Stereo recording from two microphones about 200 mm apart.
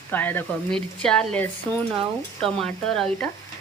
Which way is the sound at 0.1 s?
10° left (ahead or behind).